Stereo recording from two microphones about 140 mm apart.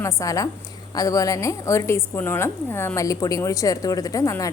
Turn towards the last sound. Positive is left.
turn(degrees=25)  # may be behind; listen again after turning